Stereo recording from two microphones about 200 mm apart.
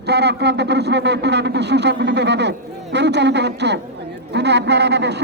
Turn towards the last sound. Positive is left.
turn(degrees=-60)  # may be behind; listen again after turning